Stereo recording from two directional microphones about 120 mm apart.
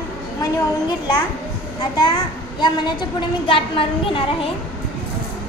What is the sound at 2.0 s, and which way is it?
A child's voice, 40° left (ahead or behind).